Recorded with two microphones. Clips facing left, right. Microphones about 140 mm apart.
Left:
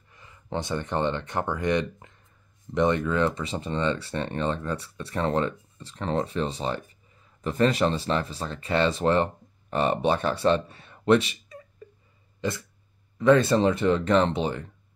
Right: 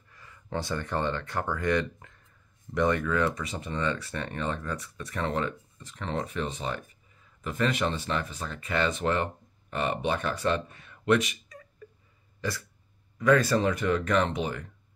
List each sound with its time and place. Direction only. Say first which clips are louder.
0.1 s speech: left 2 dB; 20° left (ahead or behind)
12.4 s burping: left 4 dB; 20° left (ahead or behind)
13.2 s speech: left 4 dB; 25° left (ahead or behind)